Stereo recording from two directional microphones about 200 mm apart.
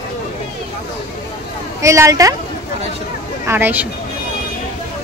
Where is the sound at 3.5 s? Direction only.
10° right (ahead or behind).